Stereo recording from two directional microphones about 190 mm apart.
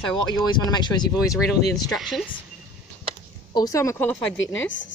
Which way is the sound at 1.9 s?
Centre (ahead or behind).